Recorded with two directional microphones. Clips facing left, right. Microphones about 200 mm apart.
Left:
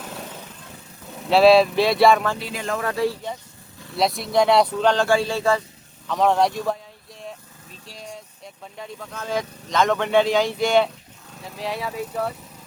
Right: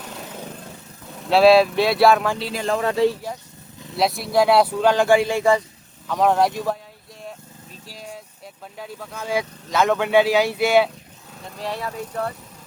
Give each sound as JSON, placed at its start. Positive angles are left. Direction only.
{"t": 1.2, "sound": "speech", "side_deg": 0}
{"t": 2.4, "sound": "a man's voice", "side_deg": -30}
{"t": 3.9, "sound": "speech", "side_deg": 0}
{"t": 6.1, "sound": "speech", "side_deg": 0}
{"t": 7.9, "sound": "vehicle", "side_deg": -5}
{"t": 8.8, "sound": "speech", "side_deg": -5}